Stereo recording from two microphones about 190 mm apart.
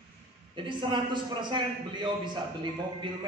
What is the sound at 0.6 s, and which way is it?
A man's voice, 25° right (ahead or behind).